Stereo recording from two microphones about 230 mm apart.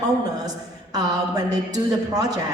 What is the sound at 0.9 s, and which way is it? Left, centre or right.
A woman's voice, centre.